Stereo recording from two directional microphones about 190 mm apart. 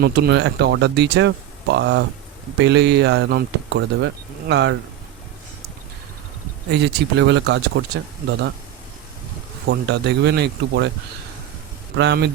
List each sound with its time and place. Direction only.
0.0 s speech: 60° right (ahead or behind)
6.7 s speech: 65° right (ahead or behind)
9.6 s speech: 60° right (ahead or behind)
11.9 s speech: 65° right (ahead or behind)